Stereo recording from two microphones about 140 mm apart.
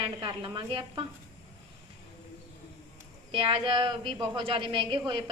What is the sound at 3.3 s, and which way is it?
A woman's voice, 40° right (ahead or behind).